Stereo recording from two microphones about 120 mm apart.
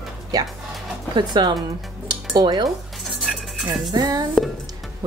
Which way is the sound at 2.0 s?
35° right (ahead or behind).